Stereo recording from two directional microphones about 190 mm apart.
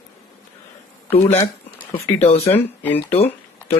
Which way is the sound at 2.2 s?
35° left (ahead or behind).